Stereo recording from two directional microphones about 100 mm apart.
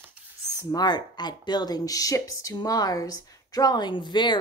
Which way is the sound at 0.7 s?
45° left (ahead or behind).